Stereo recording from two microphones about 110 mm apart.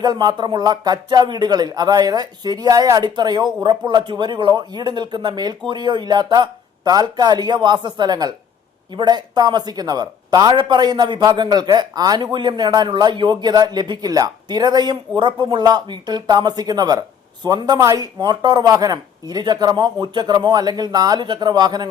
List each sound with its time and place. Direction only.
0.0 s speech: 40° right (ahead or behind)